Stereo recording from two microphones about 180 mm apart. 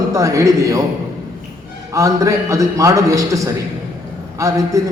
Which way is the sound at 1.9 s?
20° right (ahead or behind).